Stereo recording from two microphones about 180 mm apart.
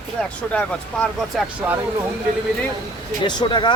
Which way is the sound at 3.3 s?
25° left (ahead or behind).